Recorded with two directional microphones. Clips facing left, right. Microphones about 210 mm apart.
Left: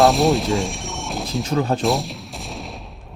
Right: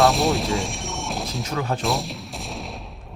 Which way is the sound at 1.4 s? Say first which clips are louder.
Left 7 dB; 30° left (ahead or behind).